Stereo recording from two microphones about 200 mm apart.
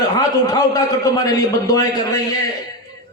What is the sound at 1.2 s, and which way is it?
Speech, 20° left (ahead or behind).